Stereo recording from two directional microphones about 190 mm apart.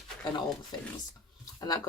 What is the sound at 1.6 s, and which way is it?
Speech, 20° left (ahead or behind).